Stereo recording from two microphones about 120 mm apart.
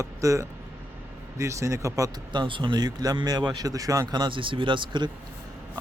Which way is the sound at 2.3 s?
40° right (ahead or behind).